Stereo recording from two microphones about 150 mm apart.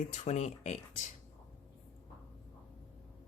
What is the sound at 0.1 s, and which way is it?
Speech, 50° left (ahead or behind).